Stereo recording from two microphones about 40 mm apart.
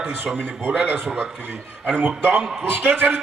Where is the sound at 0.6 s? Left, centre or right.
Right.